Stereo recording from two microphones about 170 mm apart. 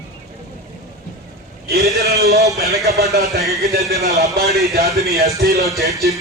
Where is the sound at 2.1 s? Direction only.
20° right (ahead or behind).